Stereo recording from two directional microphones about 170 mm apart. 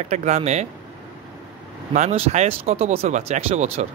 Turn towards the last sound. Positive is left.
turn(degrees=-40)  # may be behind; listen again after turning